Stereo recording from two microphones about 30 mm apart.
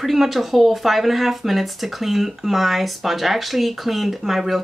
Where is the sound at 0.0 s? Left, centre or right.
Centre.